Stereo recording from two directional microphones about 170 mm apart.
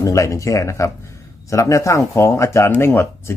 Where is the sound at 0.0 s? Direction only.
20° left (ahead or behind).